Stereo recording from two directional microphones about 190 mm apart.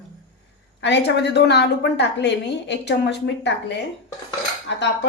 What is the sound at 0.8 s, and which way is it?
A woman's voice, 65° left (ahead or behind).